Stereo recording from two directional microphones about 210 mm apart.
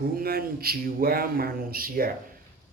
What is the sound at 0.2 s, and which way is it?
Speech, 45° right (ahead or behind).